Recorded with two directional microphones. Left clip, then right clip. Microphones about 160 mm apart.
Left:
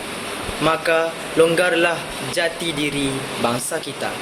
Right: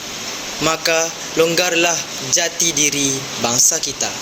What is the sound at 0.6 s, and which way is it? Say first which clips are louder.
Speech: right 1 dB; 45° right (ahead or behind).